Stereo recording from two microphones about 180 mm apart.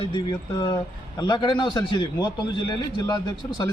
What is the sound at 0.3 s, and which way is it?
A man's voice, 25° left (ahead or behind).